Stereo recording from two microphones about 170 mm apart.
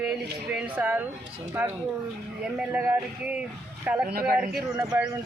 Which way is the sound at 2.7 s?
10° right (ahead or behind).